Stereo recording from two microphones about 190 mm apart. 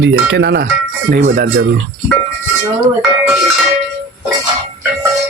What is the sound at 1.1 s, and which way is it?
Speech, 50° right (ahead or behind).